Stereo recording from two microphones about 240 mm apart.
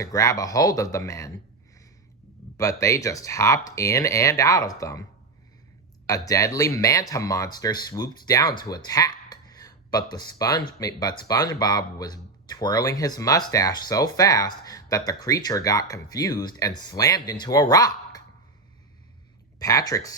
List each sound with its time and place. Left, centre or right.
0.0 s speech: centre
2.6 s speech: centre
6.1 s speech: centre
19.5 s speech: centre